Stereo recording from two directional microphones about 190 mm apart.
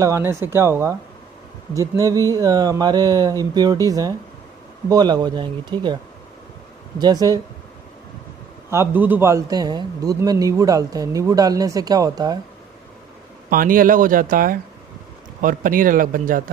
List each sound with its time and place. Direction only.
0.0 s a man's voice: 15° right (ahead or behind)
7.0 s a man's voice: 20° right (ahead or behind)
8.6 s a man's voice: 10° right (ahead or behind)
13.5 s speech: 45° right (ahead or behind)